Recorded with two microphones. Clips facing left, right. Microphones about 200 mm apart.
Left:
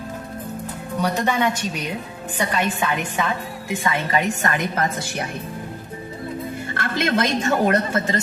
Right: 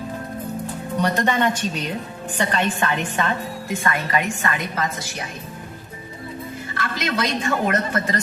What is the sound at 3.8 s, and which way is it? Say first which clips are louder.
Speech: left 1 dB; 20° left (ahead or behind).